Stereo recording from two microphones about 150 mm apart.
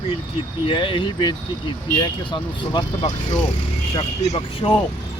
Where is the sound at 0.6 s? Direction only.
35° left (ahead or behind).